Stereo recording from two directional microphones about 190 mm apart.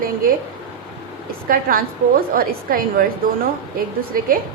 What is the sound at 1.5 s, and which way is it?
A woman's voice, 50° right (ahead or behind).